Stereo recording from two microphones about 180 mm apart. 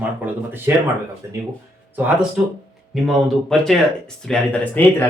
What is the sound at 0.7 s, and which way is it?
Speech, 15° right (ahead or behind).